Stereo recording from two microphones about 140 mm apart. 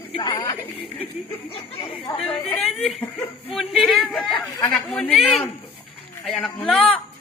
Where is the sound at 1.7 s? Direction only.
40° left (ahead or behind).